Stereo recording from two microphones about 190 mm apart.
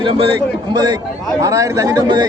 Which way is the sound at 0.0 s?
25° right (ahead or behind).